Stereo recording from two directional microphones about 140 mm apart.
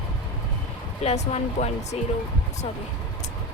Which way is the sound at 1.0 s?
50° left (ahead or behind).